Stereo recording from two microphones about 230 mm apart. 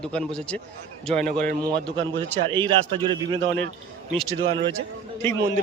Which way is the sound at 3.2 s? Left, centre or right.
Right.